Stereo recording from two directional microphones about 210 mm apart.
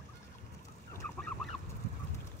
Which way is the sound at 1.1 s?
5° left (ahead or behind).